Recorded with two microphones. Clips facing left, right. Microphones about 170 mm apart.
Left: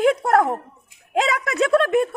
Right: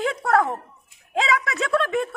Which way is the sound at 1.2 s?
50° left (ahead or behind).